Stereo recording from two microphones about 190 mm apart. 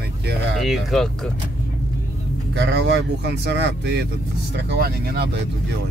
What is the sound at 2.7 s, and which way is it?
Speech, 65° right (ahead or behind).